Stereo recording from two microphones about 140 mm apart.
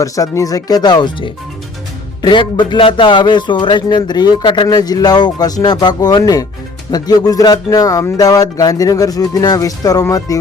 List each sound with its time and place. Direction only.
0.0 s music: 25° left (ahead or behind)
2.2 s speech: 35° left (ahead or behind)
6.9 s music: 30° left (ahead or behind)